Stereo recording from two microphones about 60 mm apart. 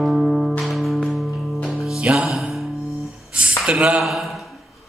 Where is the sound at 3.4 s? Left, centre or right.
Centre.